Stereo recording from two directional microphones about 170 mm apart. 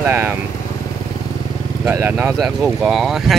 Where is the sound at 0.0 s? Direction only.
10° right (ahead or behind).